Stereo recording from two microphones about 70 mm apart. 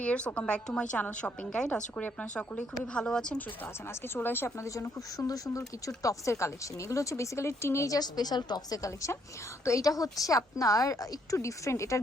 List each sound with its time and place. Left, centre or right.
0.0 s a woman's voice: centre
3.8 s speech: left
7.9 s a woman's voice: left
8.8 s a woman's voice: left